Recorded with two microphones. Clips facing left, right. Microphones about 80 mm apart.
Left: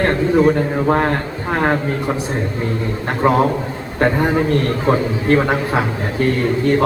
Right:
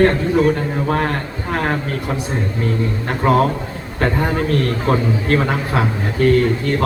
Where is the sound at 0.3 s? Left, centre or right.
Centre.